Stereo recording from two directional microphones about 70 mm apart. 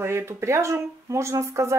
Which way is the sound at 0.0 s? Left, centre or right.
Right.